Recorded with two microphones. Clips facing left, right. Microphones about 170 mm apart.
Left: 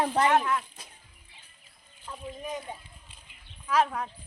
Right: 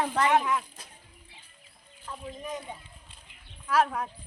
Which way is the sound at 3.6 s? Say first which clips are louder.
Even; 5° right (ahead or behind).